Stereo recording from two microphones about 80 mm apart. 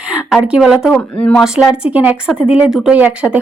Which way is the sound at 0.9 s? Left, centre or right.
Centre.